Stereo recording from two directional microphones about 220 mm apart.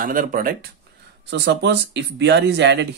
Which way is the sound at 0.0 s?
40° right (ahead or behind).